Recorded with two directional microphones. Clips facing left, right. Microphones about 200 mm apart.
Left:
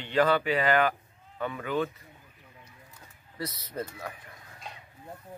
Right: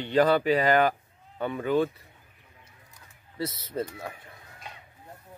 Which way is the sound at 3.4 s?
25° right (ahead or behind).